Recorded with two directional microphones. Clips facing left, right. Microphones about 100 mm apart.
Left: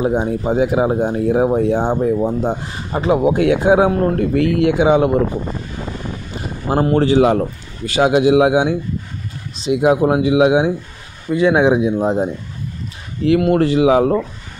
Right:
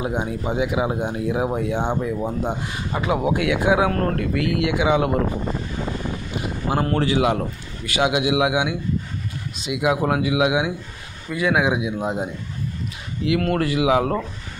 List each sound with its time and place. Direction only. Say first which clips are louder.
0.0 s speech: left 7 dB; 35° left (ahead or behind)
3.9 s speech: left 6 dB; 15° left (ahead or behind)
4.2 s speech: left 7 dB; 35° left (ahead or behind)
5.2 s speech: left 4 dB; centre (ahead or behind)
5.9 s a sound: even; centre (ahead or behind)
6.7 s speech: left 7 dB; 30° left (ahead or behind)
13.4 s speech: left 7 dB; 25° left (ahead or behind)